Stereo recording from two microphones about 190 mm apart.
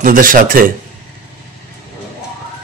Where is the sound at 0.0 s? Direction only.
45° right (ahead or behind).